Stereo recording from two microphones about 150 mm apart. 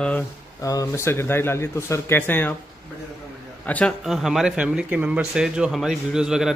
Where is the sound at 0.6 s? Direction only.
20° left (ahead or behind).